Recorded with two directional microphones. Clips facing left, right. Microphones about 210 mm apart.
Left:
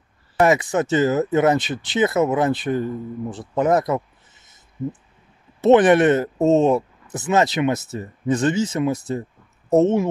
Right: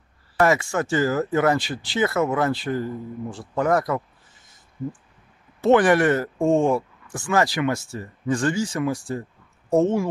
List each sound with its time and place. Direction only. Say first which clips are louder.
0.4 s speech: left 3 dB; 20° left (ahead or behind)
5.6 s speech: left 3 dB; 20° left (ahead or behind)